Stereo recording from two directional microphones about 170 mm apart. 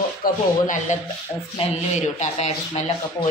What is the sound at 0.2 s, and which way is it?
Speech, 50° left (ahead or behind).